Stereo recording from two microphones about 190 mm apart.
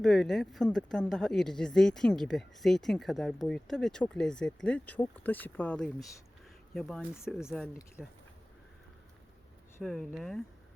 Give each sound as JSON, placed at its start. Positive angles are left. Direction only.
{"t": 0.0, "sound": "speech", "side_deg": 0}
{"t": 7.7, "sound": "speech", "side_deg": 15}
{"t": 9.8, "sound": "speech", "side_deg": 0}